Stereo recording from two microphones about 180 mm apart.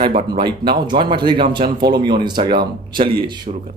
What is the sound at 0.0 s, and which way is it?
Speech, 35° right (ahead or behind).